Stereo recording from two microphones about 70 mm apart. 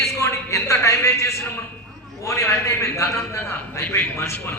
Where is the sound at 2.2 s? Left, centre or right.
Left.